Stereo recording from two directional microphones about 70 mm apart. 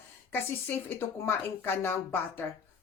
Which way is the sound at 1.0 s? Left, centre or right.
Left.